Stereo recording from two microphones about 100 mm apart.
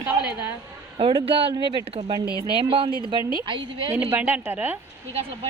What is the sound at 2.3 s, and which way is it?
Speech, 40° left (ahead or behind).